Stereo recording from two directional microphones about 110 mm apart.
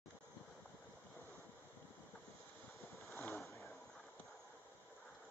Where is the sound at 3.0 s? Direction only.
Centre (ahead or behind).